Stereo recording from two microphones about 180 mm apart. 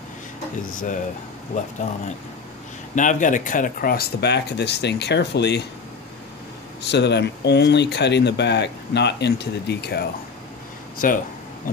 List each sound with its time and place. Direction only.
0.6 s speech: 50° left (ahead or behind)
3.0 s speech: 45° left (ahead or behind); by 5.6 s 70° left (ahead or behind)
6.8 s speech: 70° left (ahead or behind)
11.0 s speech: 50° left (ahead or behind)